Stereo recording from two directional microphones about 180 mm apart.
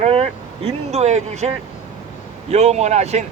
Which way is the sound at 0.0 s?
35° right (ahead or behind).